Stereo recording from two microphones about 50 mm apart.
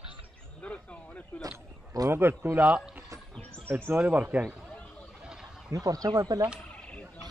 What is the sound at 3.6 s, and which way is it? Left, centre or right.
Speech, right.